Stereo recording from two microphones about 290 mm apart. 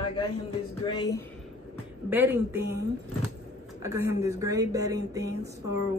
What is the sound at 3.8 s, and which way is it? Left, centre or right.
Speech, centre.